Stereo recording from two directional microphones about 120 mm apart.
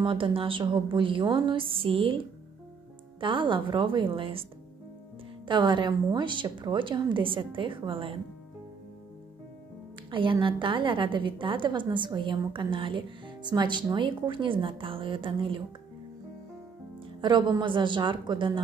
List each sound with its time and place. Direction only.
0.0 s a woman's voice: 45° right (ahead or behind)
3.2 s a woman's voice: 45° right (ahead or behind)
5.5 s a woman's voice: 40° right (ahead or behind)
10.4 s a woman's voice: 45° right (ahead or behind)
17.2 s a woman's voice: 40° right (ahead or behind)